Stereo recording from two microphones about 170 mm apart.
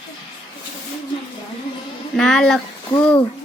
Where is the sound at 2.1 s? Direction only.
5° left (ahead or behind).